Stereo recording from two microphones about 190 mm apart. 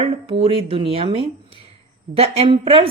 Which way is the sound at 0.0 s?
30° right (ahead or behind).